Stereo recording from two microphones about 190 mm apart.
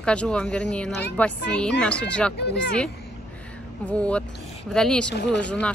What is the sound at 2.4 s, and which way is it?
Speech, 65° left (ahead or behind).